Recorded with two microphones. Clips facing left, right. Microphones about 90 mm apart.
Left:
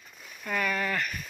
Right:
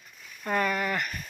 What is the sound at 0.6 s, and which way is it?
Speech, 20° right (ahead or behind).